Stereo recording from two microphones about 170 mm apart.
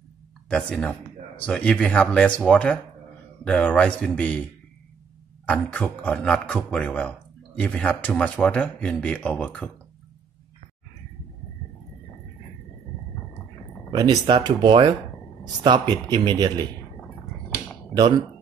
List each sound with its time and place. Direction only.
0.5 s a man's voice: 5° left (ahead or behind)
5.5 s a man's voice: 5° left (ahead or behind)
13.9 s speech: 25° right (ahead or behind)